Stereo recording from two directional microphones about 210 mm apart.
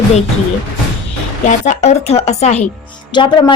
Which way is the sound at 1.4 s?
35° left (ahead or behind).